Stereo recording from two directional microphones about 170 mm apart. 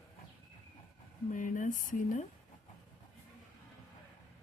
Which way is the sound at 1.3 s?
50° left (ahead or behind).